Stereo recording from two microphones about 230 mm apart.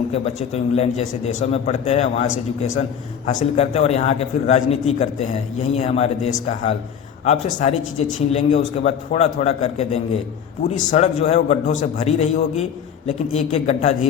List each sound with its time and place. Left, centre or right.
0.1 s speech: left